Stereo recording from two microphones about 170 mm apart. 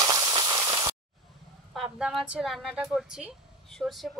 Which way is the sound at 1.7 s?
Centre (ahead or behind).